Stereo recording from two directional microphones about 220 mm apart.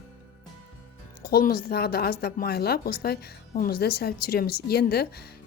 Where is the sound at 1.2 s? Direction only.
45° left (ahead or behind).